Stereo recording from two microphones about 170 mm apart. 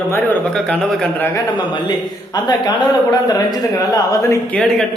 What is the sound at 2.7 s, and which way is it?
Speech, 25° left (ahead or behind).